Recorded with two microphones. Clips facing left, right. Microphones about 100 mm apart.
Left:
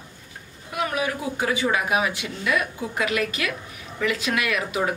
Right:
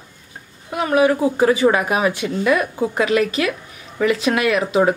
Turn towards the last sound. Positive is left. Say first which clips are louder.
# right 9 dB
turn(degrees=-30)  # may be behind; listen again after turning